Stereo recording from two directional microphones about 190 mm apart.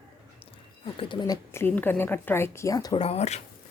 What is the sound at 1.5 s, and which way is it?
Speech, 10° left (ahead or behind).